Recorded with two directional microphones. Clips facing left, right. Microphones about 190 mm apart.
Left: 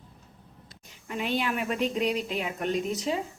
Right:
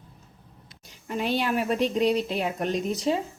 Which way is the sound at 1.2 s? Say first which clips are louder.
Right 3 dB; 35° right (ahead or behind).